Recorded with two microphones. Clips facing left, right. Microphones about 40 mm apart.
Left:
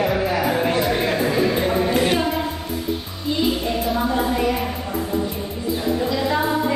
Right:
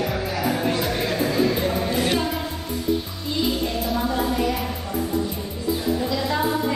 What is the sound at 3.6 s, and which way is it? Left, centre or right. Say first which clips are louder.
Music: left 3 dB; centre.